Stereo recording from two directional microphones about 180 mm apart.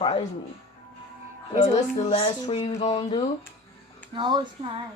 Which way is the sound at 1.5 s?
30° left (ahead or behind).